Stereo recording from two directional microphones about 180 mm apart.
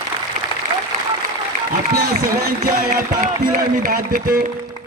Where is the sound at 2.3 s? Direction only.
55° right (ahead or behind).